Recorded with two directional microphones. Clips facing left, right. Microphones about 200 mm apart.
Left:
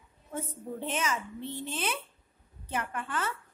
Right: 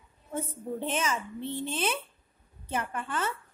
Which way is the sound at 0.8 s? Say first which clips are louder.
Right 1 dB; 30° right (ahead or behind).